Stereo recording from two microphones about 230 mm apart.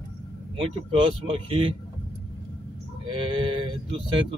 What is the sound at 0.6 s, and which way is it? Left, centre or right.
Speech, right.